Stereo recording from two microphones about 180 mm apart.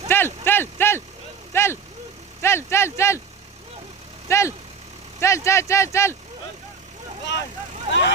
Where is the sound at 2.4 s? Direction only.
15° left (ahead or behind).